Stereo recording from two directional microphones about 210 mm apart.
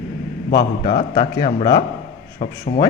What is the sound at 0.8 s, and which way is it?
Speech, 20° left (ahead or behind).